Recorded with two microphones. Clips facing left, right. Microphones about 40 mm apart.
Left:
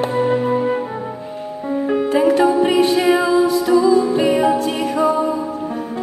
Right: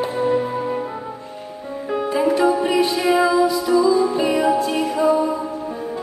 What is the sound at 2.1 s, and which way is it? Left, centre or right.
Music, left.